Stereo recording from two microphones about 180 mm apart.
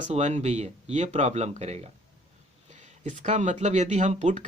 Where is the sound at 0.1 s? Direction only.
40° right (ahead or behind).